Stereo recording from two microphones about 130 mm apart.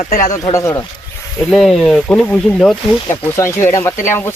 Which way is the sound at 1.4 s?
Centre (ahead or behind).